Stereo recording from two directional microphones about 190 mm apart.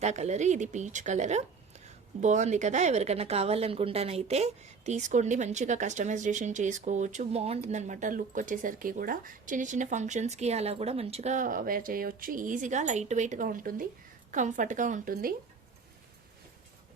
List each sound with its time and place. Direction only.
0.0 s speech: 35° right (ahead or behind)